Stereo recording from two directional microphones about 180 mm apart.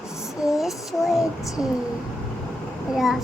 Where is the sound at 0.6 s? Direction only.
Centre (ahead or behind).